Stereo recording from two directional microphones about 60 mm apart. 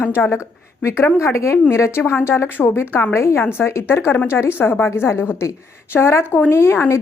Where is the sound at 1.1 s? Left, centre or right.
Left.